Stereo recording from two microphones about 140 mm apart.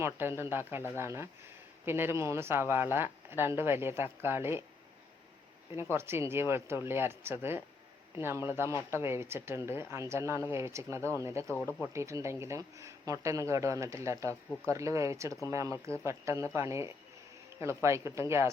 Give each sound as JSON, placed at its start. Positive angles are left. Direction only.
{"t": 0.0, "sound": "speech", "side_deg": -15}
{"t": 5.7, "sound": "speech", "side_deg": -15}
{"t": 11.5, "sound": "speech", "side_deg": 10}
{"t": 11.9, "sound": "speech", "side_deg": -20}